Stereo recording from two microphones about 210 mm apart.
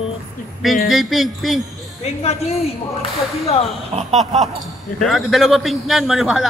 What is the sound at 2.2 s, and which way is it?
Speech, 30° left (ahead or behind).